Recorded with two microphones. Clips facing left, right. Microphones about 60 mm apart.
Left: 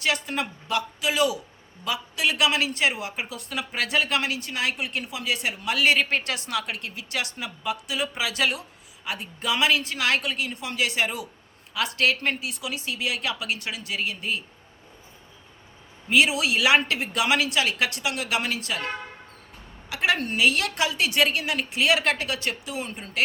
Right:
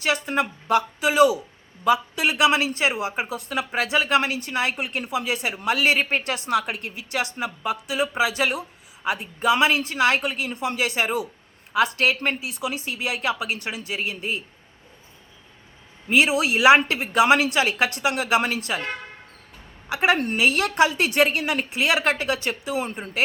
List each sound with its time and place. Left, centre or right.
0.1 s a woman's voice: right
16.1 s a woman's voice: right
19.9 s a woman's voice: right